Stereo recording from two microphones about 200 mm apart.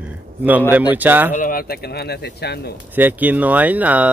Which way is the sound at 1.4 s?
45° left (ahead or behind).